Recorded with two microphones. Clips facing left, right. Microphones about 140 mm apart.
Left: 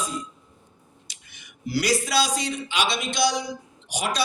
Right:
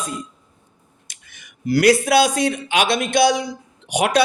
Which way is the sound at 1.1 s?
50° right (ahead or behind).